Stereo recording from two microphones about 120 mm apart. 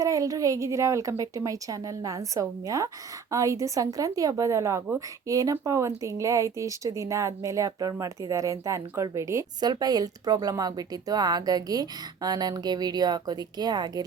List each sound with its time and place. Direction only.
0.0 s a woman's voice: 30° right (ahead or behind)
9.6 s speech: 35° right (ahead or behind)